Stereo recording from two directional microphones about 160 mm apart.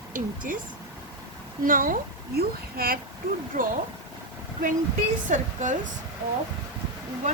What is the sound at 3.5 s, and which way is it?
Speech, 50° right (ahead or behind).